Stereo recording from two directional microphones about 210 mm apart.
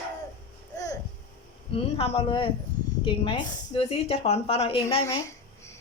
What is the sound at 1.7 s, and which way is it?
A woman's voice, 25° left (ahead or behind).